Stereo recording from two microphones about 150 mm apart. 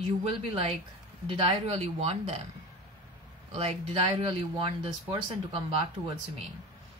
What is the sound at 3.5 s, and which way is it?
Speech, 40° right (ahead or behind).